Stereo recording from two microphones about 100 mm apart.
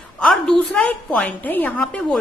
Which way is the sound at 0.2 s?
5° left (ahead or behind).